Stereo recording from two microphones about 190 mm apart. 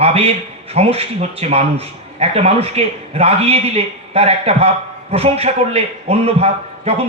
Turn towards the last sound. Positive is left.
turn(degrees=-30)  # may be behind; listen again after turning